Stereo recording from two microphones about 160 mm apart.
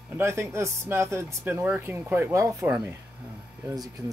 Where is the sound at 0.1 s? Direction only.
15° right (ahead or behind).